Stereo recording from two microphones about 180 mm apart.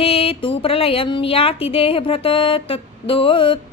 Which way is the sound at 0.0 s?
30° left (ahead or behind).